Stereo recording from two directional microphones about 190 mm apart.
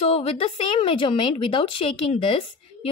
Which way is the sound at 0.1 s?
30° left (ahead or behind).